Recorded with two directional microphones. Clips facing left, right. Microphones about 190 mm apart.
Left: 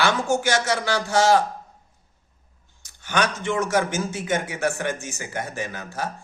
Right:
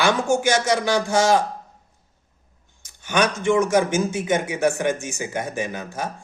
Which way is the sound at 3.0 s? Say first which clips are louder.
Right 4 dB; 15° right (ahead or behind).